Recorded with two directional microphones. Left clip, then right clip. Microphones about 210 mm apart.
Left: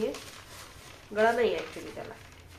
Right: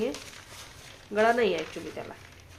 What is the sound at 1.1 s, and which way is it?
Speech, 45° right (ahead or behind).